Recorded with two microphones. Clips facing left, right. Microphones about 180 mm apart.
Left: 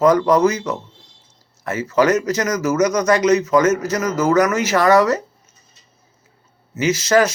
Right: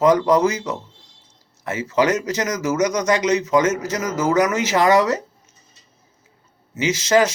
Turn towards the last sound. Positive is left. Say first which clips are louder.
# left 1 dB
turn(degrees=-20)  # may be behind; listen again after turning